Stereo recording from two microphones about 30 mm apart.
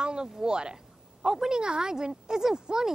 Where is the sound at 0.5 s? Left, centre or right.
Right.